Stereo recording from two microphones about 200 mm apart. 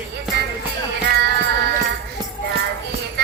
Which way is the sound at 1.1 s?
55° right (ahead or behind).